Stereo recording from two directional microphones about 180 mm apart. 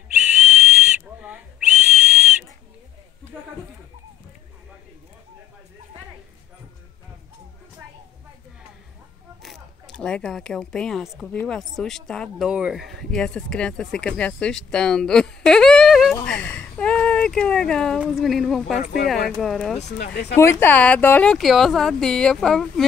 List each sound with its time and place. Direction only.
0.1 s whistle: 5° right (ahead or behind)
9.4 s speech: centre (ahead or behind)
20.0 s speech: 65° left (ahead or behind)
20.3 s speech: 15° left (ahead or behind)